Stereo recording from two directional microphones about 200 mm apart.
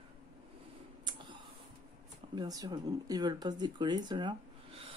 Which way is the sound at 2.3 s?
20° right (ahead or behind).